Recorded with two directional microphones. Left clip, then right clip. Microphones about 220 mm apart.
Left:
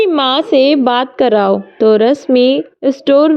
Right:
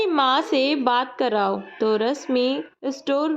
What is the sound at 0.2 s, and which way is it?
A woman's voice, 25° left (ahead or behind).